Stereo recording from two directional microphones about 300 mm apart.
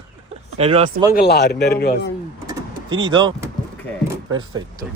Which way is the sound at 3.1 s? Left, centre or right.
Centre.